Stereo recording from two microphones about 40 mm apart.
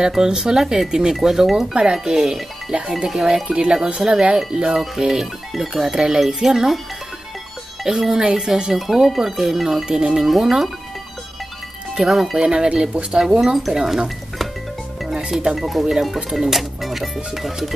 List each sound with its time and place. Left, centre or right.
0.0 s speech: centre
1.7 s speech: right
3.1 s speech: centre
3.4 s speech: right; by 6.8 s centre
8.0 s speech: centre
8.7 s speech: centre
12.1 s speech: centre
12.4 s speech: right
13.4 s speech: centre
15.5 s speech: centre